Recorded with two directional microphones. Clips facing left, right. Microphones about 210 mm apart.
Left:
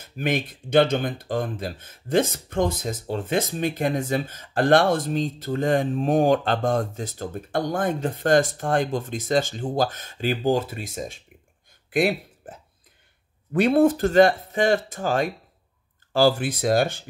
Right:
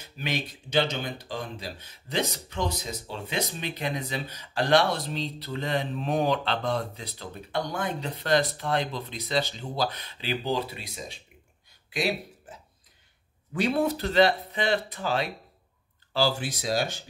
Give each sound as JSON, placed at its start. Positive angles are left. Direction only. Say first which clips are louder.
{"t": 0.0, "sound": "speech", "louder": "left 7 dB", "side_deg": 50}